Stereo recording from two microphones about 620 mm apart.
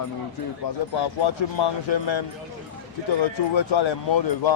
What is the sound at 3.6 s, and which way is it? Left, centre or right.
Speech, left.